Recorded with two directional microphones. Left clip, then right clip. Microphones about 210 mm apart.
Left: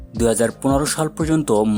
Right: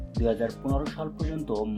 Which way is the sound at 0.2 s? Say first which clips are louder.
Left 9 dB; 45° left (ahead or behind).